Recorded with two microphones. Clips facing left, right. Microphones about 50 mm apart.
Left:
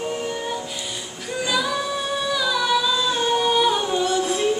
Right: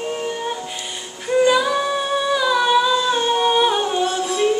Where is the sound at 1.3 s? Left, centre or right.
Right.